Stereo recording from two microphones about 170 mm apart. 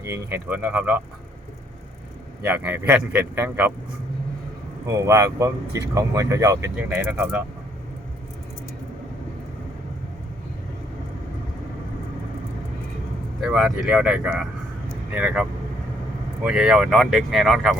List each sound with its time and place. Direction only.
0.0 s speech: 15° right (ahead or behind)
2.4 s speech: 10° right (ahead or behind)
4.9 s speech: 15° right (ahead or behind)
13.4 s speech: centre (ahead or behind)